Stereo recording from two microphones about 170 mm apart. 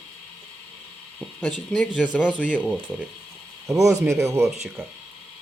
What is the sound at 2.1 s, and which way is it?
Speech, 5° right (ahead or behind).